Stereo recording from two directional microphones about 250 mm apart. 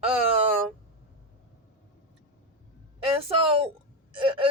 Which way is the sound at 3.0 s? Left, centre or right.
Right.